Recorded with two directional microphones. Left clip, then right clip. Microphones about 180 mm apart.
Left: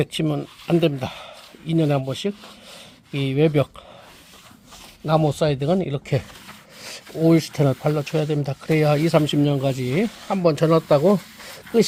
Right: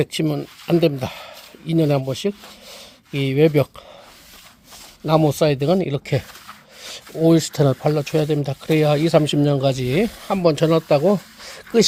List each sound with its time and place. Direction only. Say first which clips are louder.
0.0 s speech: right 2 dB; 20° right (ahead or behind)
5.0 s speech: right 3 dB; 30° right (ahead or behind)
6.8 s speech: right 2 dB; 10° right (ahead or behind); by 10.4 s 30° right (ahead or behind)
10.4 s speech: right 1 dB; 15° right (ahead or behind)
11.1 s a sound: even; 15° right (ahead or behind)